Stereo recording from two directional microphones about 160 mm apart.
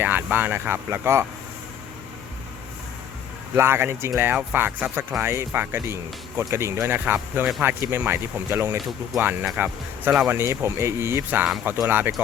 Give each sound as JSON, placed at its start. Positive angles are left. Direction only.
{"t": 0.0, "sound": "speech", "side_deg": -10}
{"t": 3.5, "sound": "speech", "side_deg": -15}